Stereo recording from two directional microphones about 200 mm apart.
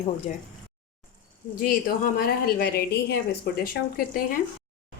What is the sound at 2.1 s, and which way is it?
A woman's voice, 50° left (ahead or behind).